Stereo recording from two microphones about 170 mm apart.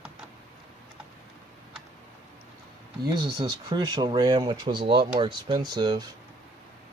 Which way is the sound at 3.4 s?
20° right (ahead or behind).